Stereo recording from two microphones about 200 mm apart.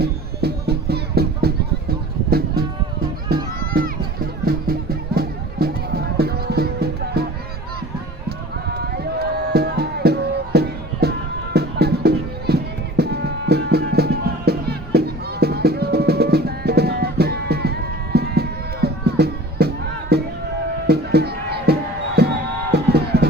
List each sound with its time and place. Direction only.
0.0 s music: 55° right (ahead or behind)
8.7 s music: 55° right (ahead or behind)